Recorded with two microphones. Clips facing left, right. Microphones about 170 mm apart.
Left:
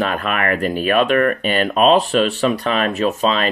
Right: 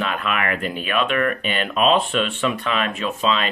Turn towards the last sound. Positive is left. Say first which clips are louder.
# left 5 dB
turn(degrees=40)  # may be behind; listen again after turning